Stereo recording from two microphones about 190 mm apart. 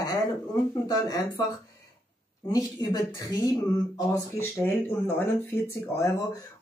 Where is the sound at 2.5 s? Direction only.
20° left (ahead or behind).